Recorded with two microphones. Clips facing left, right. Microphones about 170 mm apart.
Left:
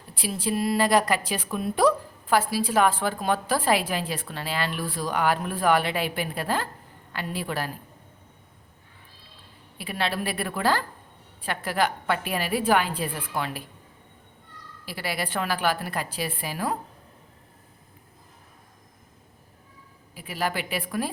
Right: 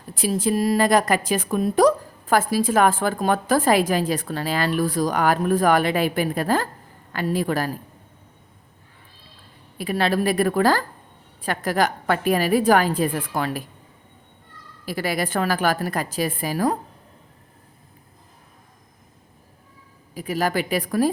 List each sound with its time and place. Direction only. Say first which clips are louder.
0.1 s a woman's voice: right 6 dB; 45° right (ahead or behind)
9.7 s a woman's voice: right 7 dB; 45° right (ahead or behind)
14.8 s a woman's voice: right 6 dB; 45° right (ahead or behind)
20.1 s a woman's voice: right 6 dB; 40° right (ahead or behind)